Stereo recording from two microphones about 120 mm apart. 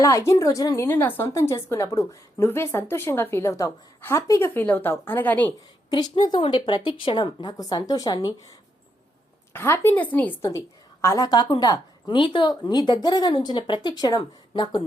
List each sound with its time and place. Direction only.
0.0 s a woman's voice: 25° left (ahead or behind)
5.9 s a woman's voice: 35° left (ahead or behind)
9.5 s a woman's voice: 20° left (ahead or behind); by 14.8 s 40° left (ahead or behind)